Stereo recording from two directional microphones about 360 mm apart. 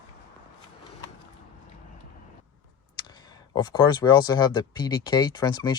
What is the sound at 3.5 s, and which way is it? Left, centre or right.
Speech, centre.